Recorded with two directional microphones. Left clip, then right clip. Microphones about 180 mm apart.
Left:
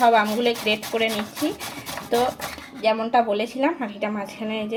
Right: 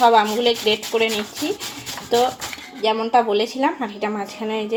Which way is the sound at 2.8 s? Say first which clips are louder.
Right 2 dB; 25° right (ahead or behind).